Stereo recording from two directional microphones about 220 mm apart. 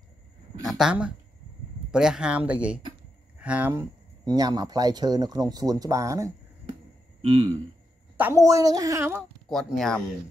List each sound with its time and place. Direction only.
0.7 s speech: centre (ahead or behind)
4.3 s speech: 20° right (ahead or behind)
7.2 s speech: 25° right (ahead or behind)
8.2 s speech: 10° right (ahead or behind)
9.5 s speech: centre (ahead or behind)